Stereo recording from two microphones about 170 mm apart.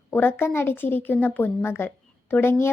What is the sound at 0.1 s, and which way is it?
A woman's voice, 10° left (ahead or behind).